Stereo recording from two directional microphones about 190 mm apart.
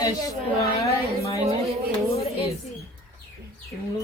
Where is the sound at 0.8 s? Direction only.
15° left (ahead or behind).